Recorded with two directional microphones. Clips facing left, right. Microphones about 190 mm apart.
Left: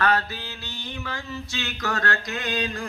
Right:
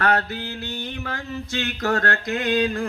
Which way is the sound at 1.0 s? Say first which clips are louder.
Right 3 dB; 55° right (ahead or behind).